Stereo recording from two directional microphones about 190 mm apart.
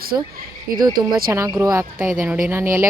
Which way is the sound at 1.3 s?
15° right (ahead or behind).